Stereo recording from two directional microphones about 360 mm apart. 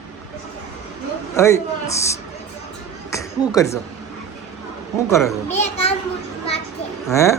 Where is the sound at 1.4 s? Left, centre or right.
Centre.